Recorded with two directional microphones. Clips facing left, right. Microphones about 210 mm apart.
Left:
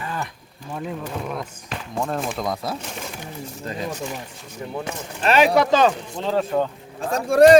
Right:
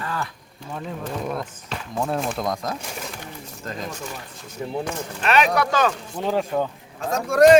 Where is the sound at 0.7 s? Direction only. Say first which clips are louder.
Left 2 dB; 5° left (ahead or behind).